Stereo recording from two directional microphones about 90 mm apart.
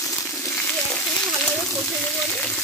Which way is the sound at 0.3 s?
25° left (ahead or behind).